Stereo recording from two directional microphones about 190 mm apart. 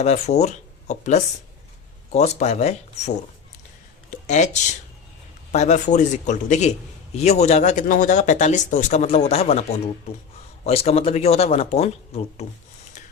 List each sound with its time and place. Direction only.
0.0 s speech: 35° left (ahead or behind)
4.1 s speech: 40° left (ahead or behind)
5.5 s speech: 35° left (ahead or behind)